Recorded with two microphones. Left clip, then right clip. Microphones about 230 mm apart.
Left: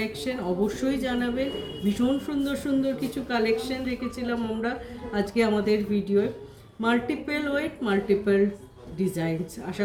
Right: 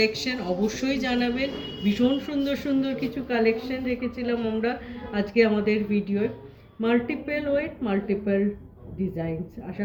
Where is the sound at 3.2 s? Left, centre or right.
Centre.